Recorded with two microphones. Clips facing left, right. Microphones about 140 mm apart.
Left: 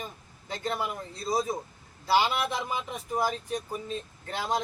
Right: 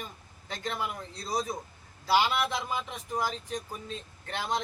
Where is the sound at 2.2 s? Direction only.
15° left (ahead or behind).